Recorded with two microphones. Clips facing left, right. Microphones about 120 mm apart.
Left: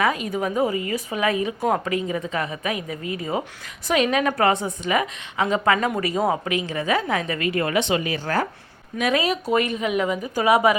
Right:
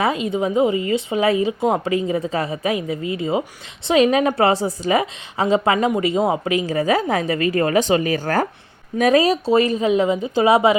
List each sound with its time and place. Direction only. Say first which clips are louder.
0.0 s speech: right 3 dB; 25° right (ahead or behind)
6.4 s speech: right 6 dB; 35° right (ahead or behind)